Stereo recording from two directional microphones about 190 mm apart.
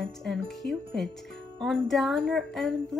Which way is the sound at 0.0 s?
Centre (ahead or behind).